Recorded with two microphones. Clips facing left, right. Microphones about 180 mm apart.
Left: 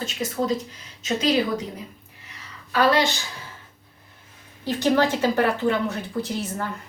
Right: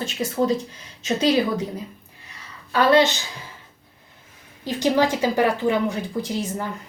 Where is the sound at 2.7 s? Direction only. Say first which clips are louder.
Right 3 dB; 25° right (ahead or behind).